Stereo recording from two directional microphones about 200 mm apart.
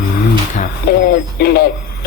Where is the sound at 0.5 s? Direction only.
45° left (ahead or behind).